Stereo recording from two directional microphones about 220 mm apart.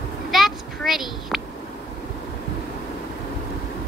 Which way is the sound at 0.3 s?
Centre (ahead or behind).